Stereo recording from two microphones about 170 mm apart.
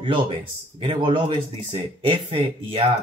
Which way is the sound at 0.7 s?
30° right (ahead or behind).